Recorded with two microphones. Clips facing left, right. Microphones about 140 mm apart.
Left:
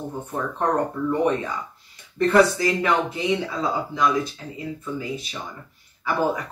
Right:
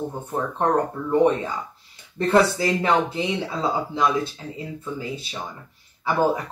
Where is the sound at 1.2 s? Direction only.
25° right (ahead or behind).